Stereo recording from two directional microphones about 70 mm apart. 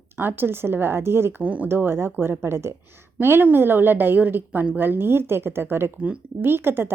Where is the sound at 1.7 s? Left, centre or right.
Right.